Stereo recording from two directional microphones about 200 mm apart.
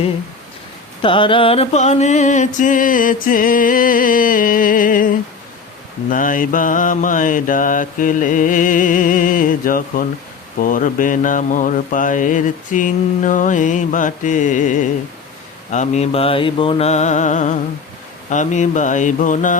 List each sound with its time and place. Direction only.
1.0 s music: 25° left (ahead or behind); by 5.0 s 40° left (ahead or behind)
6.1 s mantra: 40° left (ahead or behind)